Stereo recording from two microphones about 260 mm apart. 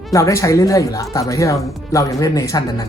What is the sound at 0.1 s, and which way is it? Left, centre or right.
Speech, centre.